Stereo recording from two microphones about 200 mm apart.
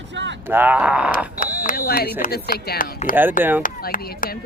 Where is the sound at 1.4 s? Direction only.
45° left (ahead or behind).